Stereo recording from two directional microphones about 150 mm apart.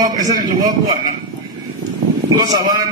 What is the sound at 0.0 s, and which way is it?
Speech, 25° right (ahead or behind).